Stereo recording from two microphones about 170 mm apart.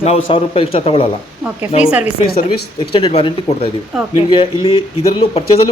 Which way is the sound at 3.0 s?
30° left (ahead or behind).